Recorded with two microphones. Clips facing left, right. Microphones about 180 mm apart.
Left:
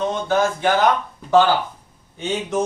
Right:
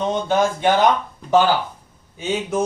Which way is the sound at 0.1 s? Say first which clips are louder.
Right 1 dB; 20° right (ahead or behind).